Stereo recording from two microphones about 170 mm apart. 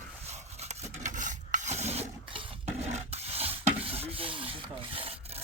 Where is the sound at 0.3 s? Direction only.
40° right (ahead or behind).